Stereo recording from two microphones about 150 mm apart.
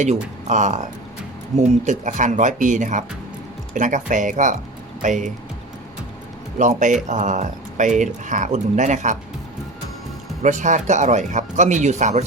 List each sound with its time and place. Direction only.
0.0 s speech: 50° right (ahead or behind)
6.6 s speech: 55° right (ahead or behind)
10.4 s speech: 55° right (ahead or behind)